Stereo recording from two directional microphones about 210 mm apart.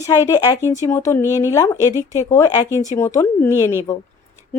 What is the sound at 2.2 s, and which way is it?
Speech, 15° left (ahead or behind).